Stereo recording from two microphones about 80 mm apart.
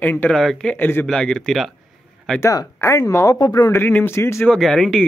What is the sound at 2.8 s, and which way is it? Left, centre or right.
Speech, left.